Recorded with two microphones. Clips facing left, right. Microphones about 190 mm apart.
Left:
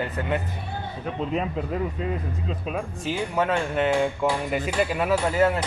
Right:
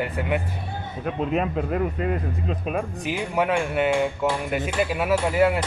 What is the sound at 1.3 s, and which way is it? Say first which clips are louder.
Speech: right 3 dB; 60° right (ahead or behind).